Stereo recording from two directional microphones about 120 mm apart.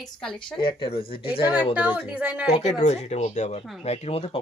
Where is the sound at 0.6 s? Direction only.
45° left (ahead or behind).